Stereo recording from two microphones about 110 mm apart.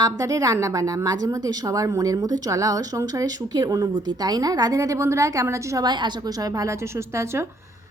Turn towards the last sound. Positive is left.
turn(degrees=-25)  # may be behind; listen again after turning